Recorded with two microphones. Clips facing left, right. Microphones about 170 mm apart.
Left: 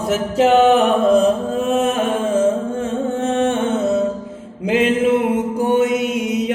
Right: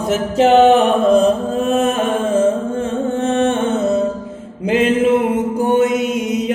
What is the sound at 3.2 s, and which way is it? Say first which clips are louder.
Music: right 2 dB; 5° left (ahead or behind).